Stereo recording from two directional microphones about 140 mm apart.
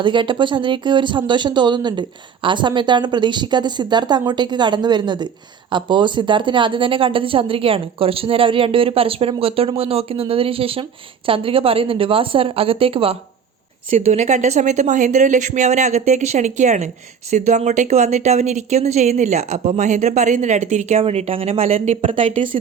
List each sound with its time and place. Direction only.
0.0 s a woman's voice: 35° right (ahead or behind)
13.9 s speech: 55° right (ahead or behind)